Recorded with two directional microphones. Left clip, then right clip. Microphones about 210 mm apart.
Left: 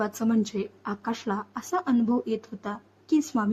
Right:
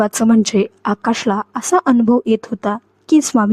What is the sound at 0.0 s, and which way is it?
A woman's voice, 50° right (ahead or behind).